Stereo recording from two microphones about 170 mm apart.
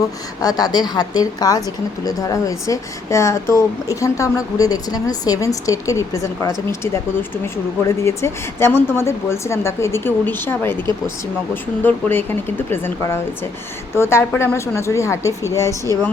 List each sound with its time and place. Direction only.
0.4 s speech: 20° left (ahead or behind)